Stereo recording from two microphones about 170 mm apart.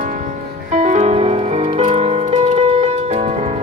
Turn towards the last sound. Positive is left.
turn(degrees=-40)  # may be behind; listen again after turning